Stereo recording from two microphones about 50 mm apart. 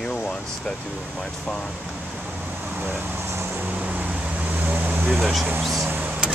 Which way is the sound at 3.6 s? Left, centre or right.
Right.